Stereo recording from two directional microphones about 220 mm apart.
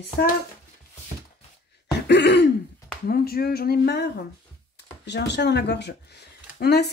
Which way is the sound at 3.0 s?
45° left (ahead or behind).